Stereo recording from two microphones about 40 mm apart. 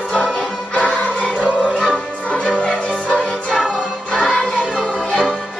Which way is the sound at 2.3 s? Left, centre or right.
Left.